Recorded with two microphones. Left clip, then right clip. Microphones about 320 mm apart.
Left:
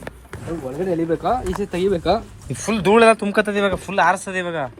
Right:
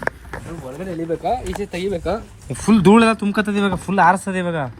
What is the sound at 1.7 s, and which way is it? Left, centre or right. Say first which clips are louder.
Speech: left 4 dB; centre.